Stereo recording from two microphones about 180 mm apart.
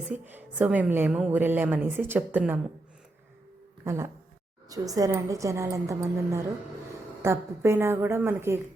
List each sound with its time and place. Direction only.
0.1 s a woman's voice: 10° right (ahead or behind)
3.8 s a woman's voice: 15° right (ahead or behind)